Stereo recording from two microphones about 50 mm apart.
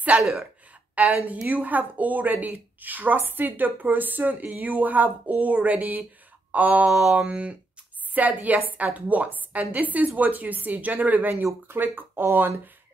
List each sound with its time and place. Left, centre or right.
0.2 s a woman's voice: centre
1.0 s a woman's voice: right
6.9 s mantra: centre
7.2 s a woman's voice: right